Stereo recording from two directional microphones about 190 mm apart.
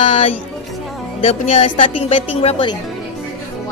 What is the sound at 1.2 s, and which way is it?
A woman's voice, 30° left (ahead or behind).